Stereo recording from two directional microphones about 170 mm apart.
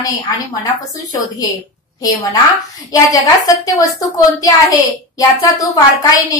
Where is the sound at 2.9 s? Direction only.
20° left (ahead or behind).